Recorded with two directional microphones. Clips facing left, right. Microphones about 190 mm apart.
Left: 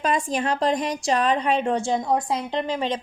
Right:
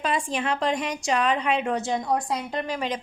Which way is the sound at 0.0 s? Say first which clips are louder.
Left 3 dB; 40° left (ahead or behind).